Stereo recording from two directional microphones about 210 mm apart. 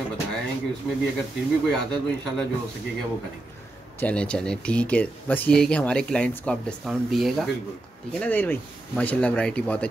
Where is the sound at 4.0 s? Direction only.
5° left (ahead or behind).